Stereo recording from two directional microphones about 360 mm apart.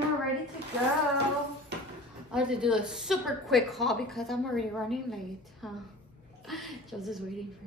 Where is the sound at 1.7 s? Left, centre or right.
Right.